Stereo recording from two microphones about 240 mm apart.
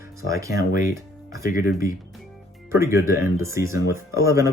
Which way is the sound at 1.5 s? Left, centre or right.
Left.